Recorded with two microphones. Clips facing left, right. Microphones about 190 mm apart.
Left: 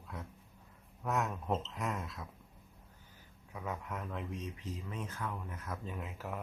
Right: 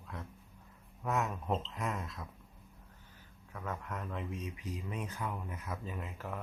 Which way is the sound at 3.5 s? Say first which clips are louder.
Even; 5° left (ahead or behind).